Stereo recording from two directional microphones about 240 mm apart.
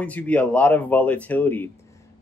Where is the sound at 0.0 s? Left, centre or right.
Centre.